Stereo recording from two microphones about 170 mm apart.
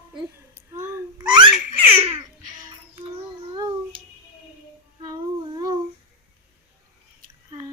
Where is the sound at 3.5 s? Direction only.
25° right (ahead or behind).